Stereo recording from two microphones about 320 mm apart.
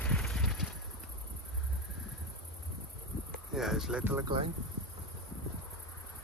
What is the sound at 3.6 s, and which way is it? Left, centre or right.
Cricket, centre.